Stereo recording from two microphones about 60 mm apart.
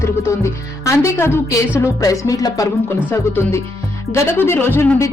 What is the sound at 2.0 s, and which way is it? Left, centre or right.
Speech, left.